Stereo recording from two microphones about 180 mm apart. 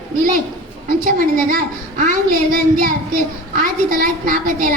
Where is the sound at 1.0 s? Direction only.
50° right (ahead or behind).